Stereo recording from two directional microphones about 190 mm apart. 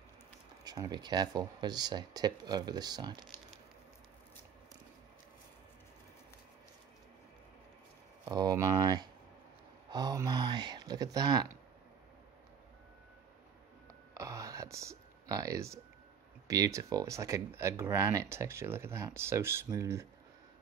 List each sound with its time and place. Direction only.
0.7 s speech: 20° right (ahead or behind)
8.3 s speech: 20° right (ahead or behind)
14.1 s a sound: 15° right (ahead or behind)
16.4 s speech: 20° right (ahead or behind)